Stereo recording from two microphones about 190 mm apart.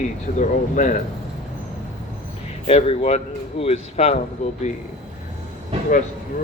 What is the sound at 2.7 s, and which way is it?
Speech, 35° left (ahead or behind).